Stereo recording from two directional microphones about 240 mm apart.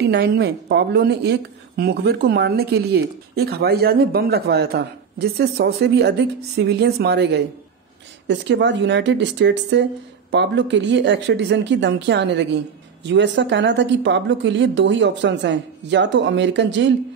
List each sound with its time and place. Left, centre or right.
0.0 s a woman's voice: right